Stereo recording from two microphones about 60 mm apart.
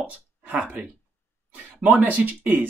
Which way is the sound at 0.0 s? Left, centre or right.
Right.